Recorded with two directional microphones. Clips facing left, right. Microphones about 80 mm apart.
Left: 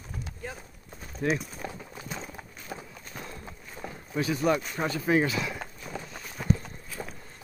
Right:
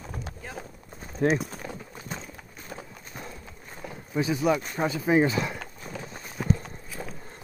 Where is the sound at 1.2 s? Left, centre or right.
Right.